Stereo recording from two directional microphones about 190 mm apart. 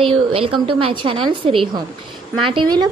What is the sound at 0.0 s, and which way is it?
Speech, 30° right (ahead or behind).